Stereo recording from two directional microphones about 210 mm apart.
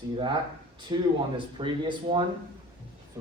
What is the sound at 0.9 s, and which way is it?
Speech, 20° right (ahead or behind).